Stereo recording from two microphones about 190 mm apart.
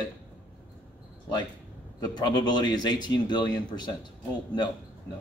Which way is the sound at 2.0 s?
20° left (ahead or behind).